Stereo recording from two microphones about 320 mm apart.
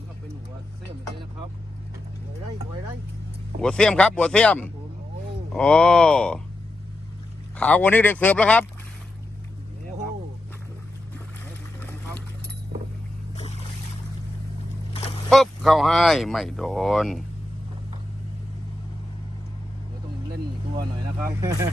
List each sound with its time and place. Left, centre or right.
3.6 s speech: centre
7.5 s speech: centre
13.3 s boat: centre
15.3 s speech: centre
20.7 s speech: centre